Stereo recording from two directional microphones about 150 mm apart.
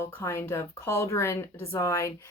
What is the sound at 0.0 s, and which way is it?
A woman's voice, 15° left (ahead or behind).